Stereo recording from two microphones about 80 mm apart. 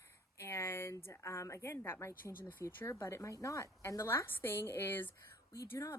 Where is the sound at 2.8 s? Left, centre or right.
Left.